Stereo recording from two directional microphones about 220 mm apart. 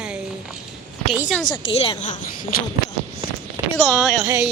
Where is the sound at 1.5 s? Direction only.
25° left (ahead or behind).